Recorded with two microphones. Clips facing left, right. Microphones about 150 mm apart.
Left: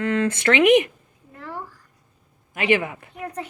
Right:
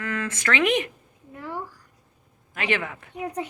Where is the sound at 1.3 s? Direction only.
10° right (ahead or behind).